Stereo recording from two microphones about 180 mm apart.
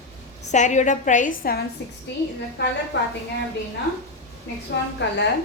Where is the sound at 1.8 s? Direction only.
65° left (ahead or behind).